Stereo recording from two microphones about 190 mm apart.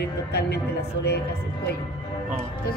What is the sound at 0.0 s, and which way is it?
Speech, 60° left (ahead or behind).